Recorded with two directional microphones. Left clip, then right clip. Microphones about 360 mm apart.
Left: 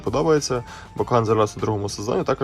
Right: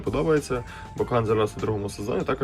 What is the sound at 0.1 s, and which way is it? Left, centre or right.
Speech, centre.